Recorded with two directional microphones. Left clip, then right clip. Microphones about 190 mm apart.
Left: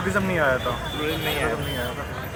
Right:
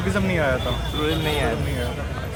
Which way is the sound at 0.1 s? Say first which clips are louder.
Even; 10° right (ahead or behind).